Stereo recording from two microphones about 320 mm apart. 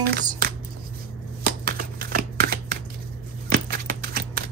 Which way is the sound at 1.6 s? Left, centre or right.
Right.